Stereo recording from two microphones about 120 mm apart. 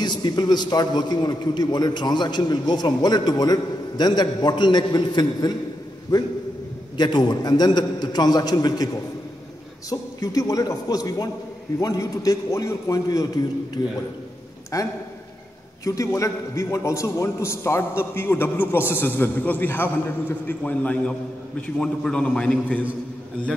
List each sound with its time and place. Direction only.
0.0 s a man's voice: 40° left (ahead or behind)
7.0 s a man's voice: 35° left (ahead or behind)
14.7 s a man's voice: 30° left (ahead or behind); by 22.8 s 10° left (ahead or behind)